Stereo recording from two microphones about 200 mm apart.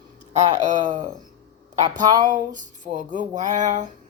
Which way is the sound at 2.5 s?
40° right (ahead or behind).